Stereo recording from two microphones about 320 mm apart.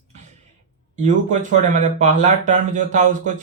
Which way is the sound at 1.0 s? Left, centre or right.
Right.